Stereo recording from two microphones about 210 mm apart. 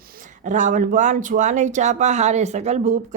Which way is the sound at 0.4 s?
35° right (ahead or behind).